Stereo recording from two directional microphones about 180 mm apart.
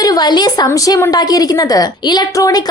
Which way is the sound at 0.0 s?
20° left (ahead or behind).